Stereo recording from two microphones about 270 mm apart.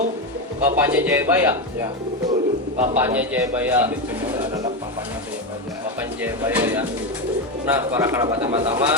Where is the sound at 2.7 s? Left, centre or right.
Right.